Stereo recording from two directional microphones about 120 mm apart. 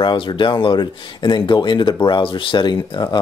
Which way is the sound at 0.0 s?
40° left (ahead or behind).